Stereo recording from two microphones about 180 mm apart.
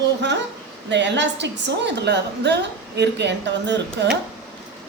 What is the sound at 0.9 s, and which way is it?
A woman's voice, 80° right.